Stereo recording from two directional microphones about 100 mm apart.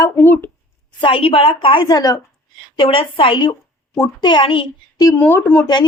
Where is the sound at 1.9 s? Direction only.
40° left (ahead or behind).